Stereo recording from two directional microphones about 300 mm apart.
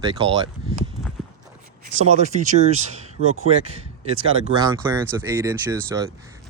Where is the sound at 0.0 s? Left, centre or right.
Centre.